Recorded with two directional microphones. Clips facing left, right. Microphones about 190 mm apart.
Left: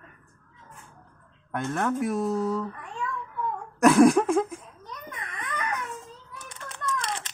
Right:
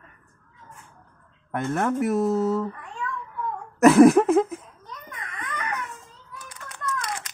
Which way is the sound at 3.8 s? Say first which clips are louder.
Right 4 dB; 5° right (ahead or behind).